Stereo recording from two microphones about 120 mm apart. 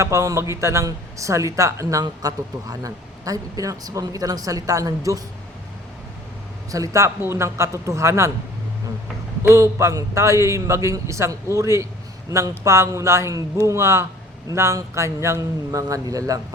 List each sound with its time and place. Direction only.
0.0 s a woman's voice: 25° right (ahead or behind)
6.7 s a woman's voice: 30° right (ahead or behind)
9.4 s a woman's voice: 25° right (ahead or behind)